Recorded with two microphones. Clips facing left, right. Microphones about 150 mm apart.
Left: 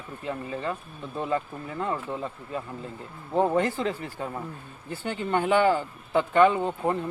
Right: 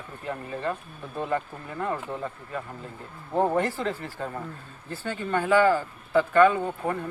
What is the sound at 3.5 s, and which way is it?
Speech, 20° left (ahead or behind).